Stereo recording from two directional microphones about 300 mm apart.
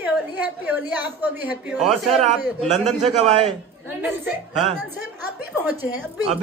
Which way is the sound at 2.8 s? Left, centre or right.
Right.